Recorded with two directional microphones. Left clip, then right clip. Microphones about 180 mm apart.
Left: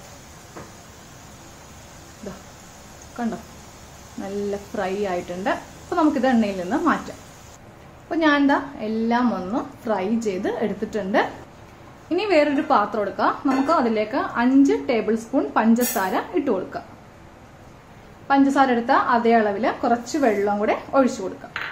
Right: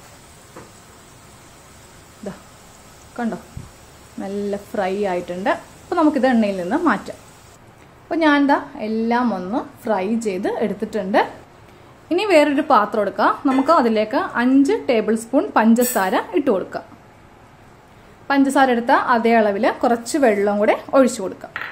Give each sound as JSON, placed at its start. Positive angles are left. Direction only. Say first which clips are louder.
{"t": 3.2, "sound": "a woman's voice", "louder": "right 3 dB", "side_deg": -35}
{"t": 8.1, "sound": "a woman's voice", "louder": "right 3 dB", "side_deg": -35}
{"t": 18.2, "sound": "a woman's voice", "louder": "right 2 dB", "side_deg": -50}